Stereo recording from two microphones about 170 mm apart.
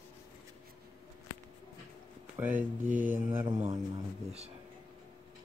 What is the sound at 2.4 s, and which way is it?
Speech, 10° right (ahead or behind).